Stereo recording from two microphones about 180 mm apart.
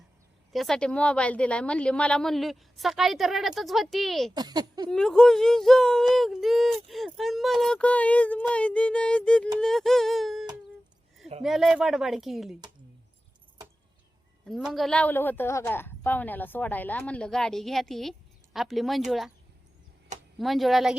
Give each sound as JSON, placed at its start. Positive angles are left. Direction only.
{"t": 0.5, "sound": "speech", "side_deg": 0}
{"t": 4.4, "sound": "speech", "side_deg": -25}
{"t": 4.9, "sound": "speech", "side_deg": 5}
{"t": 11.4, "sound": "speech", "side_deg": 0}
{"t": 14.4, "sound": "a woman's voice", "side_deg": 0}
{"t": 20.4, "sound": "speech", "side_deg": 0}